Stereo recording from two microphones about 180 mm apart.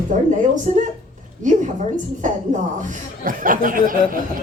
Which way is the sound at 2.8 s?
50° right (ahead or behind).